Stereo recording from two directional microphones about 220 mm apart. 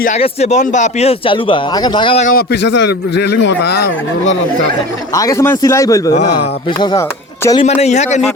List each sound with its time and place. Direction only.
0.2 s speech: 30° left (ahead or behind)
2.2 s a man's voice: 45° left (ahead or behind)
5.1 s a man's voice: 15° left (ahead or behind)
7.8 s a man's voice: 30° left (ahead or behind)